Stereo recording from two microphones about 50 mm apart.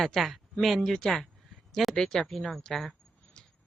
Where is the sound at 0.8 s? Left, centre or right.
Centre.